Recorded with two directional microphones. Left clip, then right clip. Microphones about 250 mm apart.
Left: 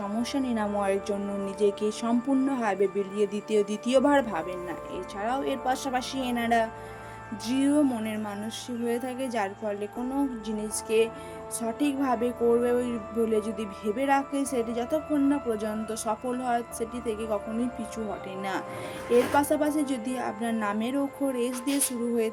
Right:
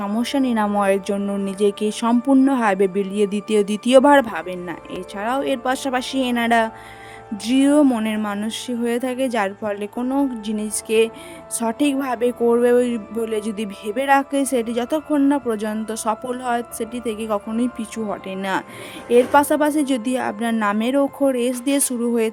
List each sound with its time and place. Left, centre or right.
0.0 s a woman's voice: right